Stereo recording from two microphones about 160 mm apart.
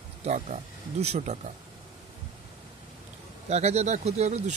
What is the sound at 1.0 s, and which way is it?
Speech, 45° right (ahead or behind).